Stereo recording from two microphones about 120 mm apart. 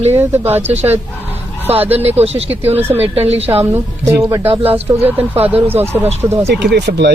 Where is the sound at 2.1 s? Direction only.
60° right (ahead or behind).